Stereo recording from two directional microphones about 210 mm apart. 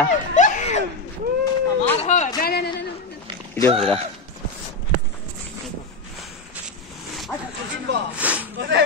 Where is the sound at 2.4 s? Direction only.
50° left (ahead or behind).